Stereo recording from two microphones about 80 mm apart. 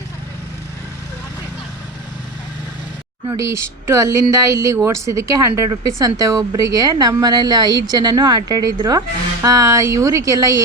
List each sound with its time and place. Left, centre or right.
3.3 s speech: right